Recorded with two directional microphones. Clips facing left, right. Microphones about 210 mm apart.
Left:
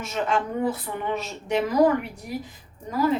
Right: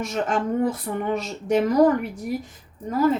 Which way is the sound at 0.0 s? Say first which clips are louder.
Right 2 dB; 45° right (ahead or behind).